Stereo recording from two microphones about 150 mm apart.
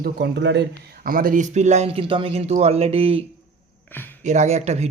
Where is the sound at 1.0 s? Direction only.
70° right (ahead or behind); by 3.2 s 40° right (ahead or behind).